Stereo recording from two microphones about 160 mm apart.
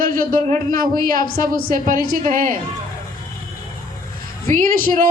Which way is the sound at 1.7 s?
60° right (ahead or behind).